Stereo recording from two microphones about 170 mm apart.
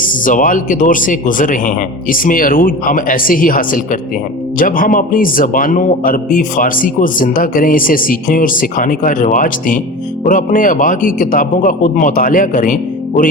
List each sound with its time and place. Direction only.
0.0 s speech: 50° left (ahead or behind)